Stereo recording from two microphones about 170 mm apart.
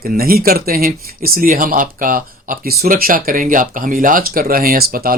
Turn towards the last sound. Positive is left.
turn(degrees=-60)  # may be behind; listen again after turning